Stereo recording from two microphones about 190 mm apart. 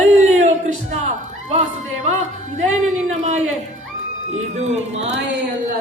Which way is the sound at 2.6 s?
40° right (ahead or behind).